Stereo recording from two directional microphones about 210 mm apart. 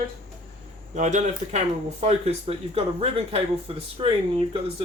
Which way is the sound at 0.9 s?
35° right (ahead or behind).